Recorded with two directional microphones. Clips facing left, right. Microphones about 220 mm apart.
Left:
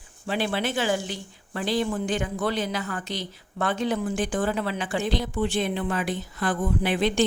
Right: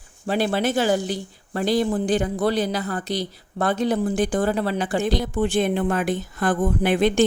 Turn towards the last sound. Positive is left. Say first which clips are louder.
# right 4 dB
turn(degrees=-50)  # may be behind; listen again after turning